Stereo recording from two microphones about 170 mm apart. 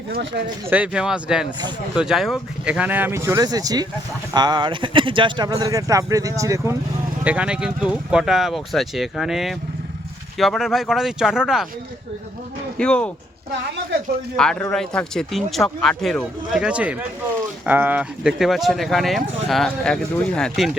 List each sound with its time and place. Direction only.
0.1 s speech: 80° right
0.7 s speech: 5° right (ahead or behind)
7.3 s speech: 5° right (ahead or behind)
12.7 s speech: 5° left (ahead or behind)
14.3 s speech: 5° left (ahead or behind)